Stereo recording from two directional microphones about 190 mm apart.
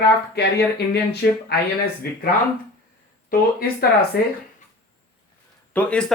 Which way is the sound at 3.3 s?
50° left (ahead or behind).